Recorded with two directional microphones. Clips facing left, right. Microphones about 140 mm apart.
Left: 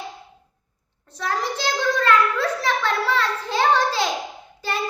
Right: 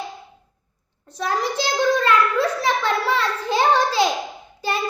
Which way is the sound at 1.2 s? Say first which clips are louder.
Right 2 dB; 15° right (ahead or behind).